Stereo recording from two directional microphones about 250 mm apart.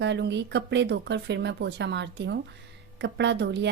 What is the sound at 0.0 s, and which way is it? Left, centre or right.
Speech, right.